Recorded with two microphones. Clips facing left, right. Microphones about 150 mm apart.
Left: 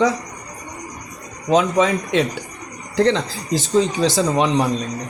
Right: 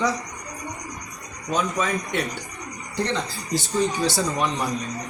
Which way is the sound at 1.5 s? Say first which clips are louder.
Left 8 dB; 90° left.